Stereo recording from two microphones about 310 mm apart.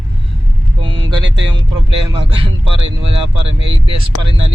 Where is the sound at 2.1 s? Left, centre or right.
Centre.